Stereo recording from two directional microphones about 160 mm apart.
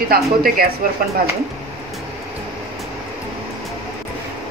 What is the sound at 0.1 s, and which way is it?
Speech, 70° right (ahead or behind).